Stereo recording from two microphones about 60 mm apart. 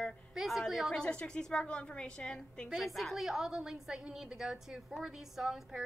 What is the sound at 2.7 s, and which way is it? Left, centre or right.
A woman's voice, centre.